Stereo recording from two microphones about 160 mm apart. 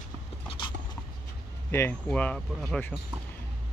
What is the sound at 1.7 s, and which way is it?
Speech, 10° left (ahead or behind).